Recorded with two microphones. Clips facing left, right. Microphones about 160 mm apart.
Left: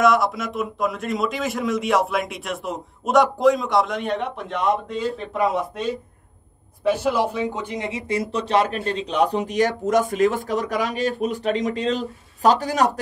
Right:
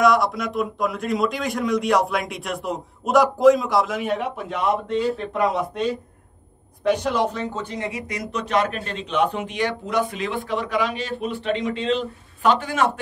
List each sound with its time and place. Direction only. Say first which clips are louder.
0.0 s a man's voice: even; centre (ahead or behind); by 12.9 s 40° left (ahead or behind)